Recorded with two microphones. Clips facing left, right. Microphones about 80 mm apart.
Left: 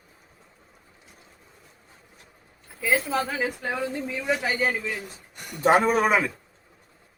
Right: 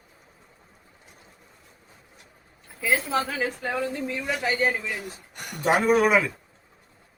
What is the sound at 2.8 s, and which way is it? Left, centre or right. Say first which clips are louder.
A man's voice: even; centre.